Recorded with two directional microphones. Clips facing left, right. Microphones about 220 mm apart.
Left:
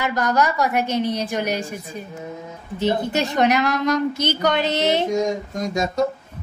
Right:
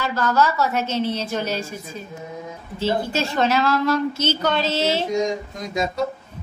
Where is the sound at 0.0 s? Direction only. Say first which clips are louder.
Even; 15° left (ahead or behind).